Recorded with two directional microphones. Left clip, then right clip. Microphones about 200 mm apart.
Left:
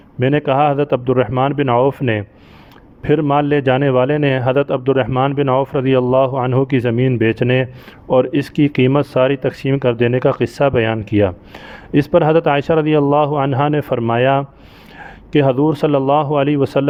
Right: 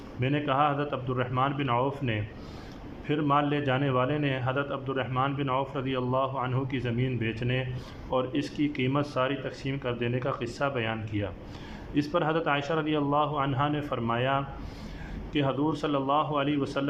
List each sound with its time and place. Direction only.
0.2 s a man's voice: 50° left (ahead or behind)